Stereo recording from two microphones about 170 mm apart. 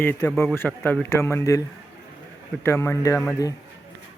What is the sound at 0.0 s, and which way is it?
Speech, 10° left (ahead or behind).